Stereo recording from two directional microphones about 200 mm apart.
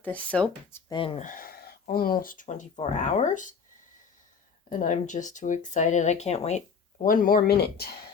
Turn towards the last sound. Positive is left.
turn(degrees=50)  # may be behind; listen again after turning